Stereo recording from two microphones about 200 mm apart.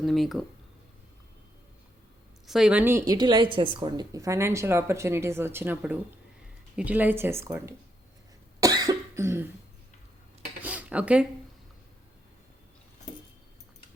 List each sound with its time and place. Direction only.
0.0 s speech: centre (ahead or behind)
2.5 s a woman's voice: 5° right (ahead or behind)
8.6 s cough: 20° right (ahead or behind)
10.6 s cutlery: 5° right (ahead or behind)